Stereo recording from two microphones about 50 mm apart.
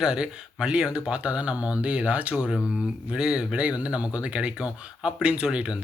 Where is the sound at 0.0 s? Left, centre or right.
Centre.